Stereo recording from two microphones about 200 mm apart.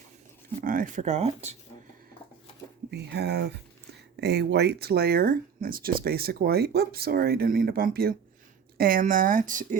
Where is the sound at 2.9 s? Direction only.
55° right (ahead or behind).